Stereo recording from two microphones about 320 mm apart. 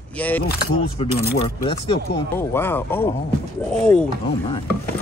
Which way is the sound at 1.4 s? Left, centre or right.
Centre.